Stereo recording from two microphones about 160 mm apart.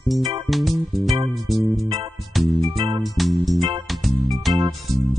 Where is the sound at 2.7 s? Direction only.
30° right (ahead or behind).